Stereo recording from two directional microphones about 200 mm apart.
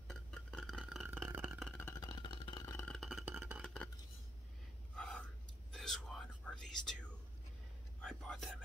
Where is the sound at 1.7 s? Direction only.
15° left (ahead or behind).